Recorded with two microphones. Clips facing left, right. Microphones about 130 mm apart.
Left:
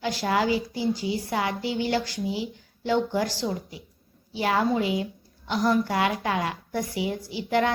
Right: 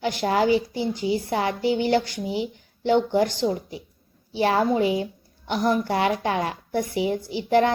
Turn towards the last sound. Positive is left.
turn(degrees=-30)  # may be behind; listen again after turning